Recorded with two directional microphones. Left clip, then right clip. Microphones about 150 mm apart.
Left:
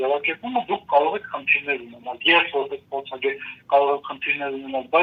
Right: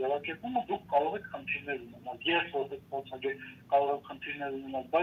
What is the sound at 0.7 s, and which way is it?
Speech, 65° left (ahead or behind).